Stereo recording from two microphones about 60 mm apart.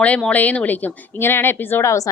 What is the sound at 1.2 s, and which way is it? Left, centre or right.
Speech, left.